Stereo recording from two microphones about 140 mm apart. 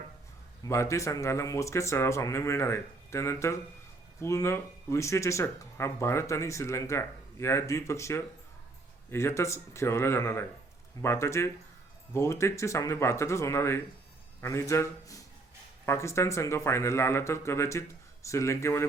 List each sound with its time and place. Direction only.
0.7 s speech: 20° left (ahead or behind)